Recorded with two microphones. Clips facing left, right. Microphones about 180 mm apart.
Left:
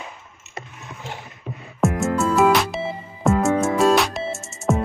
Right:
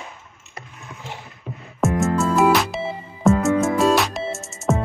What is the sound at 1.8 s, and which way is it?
Music, centre (ahead or behind).